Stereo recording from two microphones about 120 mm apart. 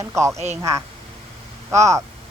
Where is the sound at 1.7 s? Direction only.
25° right (ahead or behind).